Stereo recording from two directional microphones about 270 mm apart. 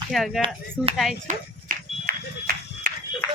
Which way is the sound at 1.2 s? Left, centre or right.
Right.